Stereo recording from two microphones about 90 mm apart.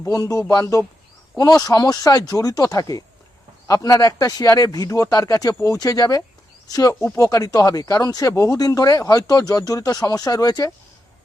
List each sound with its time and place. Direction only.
0.0 s speech: 40° left (ahead or behind)